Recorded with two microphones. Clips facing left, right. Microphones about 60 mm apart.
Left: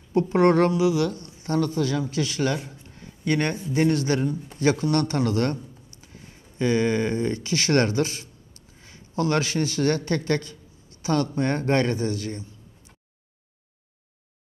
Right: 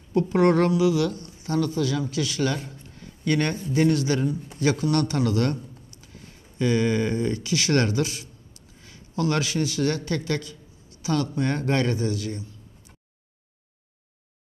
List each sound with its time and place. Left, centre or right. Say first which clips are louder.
0.1 s a man's voice: left 1 dB; left